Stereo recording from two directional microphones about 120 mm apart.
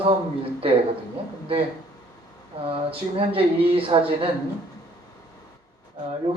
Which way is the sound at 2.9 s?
50° right (ahead or behind).